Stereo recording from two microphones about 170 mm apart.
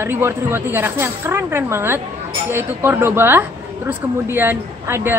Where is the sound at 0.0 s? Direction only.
15° right (ahead or behind).